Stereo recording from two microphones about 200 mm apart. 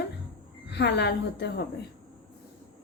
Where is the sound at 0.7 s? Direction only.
60° left (ahead or behind).